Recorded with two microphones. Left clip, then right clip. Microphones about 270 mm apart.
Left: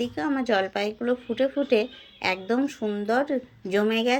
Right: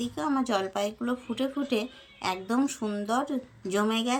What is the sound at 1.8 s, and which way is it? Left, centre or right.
A woman's voice, centre.